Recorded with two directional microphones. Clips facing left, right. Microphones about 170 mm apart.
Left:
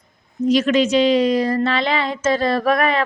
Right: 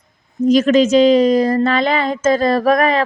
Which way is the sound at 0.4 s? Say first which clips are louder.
Right 4 dB; 45° right (ahead or behind).